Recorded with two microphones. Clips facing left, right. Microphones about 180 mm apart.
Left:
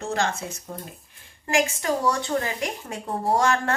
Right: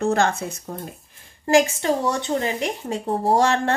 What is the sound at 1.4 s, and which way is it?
A woman's voice, 30° right (ahead or behind).